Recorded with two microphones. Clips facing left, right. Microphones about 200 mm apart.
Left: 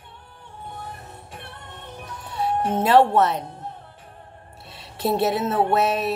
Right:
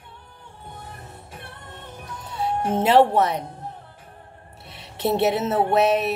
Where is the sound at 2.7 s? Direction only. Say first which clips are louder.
Even; 20° right (ahead or behind).